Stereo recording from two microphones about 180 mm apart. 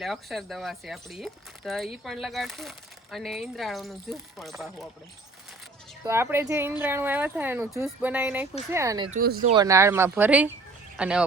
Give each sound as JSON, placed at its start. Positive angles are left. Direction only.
{"t": 0.0, "sound": "speech", "side_deg": 0}
{"t": 6.1, "sound": "speech", "side_deg": -15}
{"t": 9.1, "sound": "speech", "side_deg": -50}
{"t": 9.5, "sound": "speech", "side_deg": -20}